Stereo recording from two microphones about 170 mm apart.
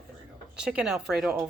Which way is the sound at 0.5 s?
5° right (ahead or behind).